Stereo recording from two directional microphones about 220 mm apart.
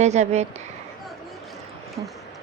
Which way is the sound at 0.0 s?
30° right (ahead or behind).